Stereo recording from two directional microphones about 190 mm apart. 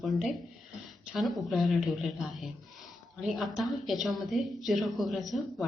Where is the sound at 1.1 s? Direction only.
Centre (ahead or behind).